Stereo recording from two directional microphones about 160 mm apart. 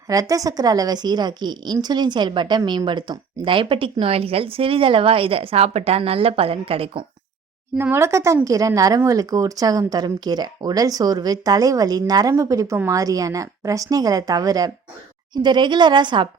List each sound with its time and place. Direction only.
0.1 s a woman's voice: 20° right (ahead or behind); by 7.0 s 35° right (ahead or behind)
7.8 s a woman's voice: 15° right (ahead or behind)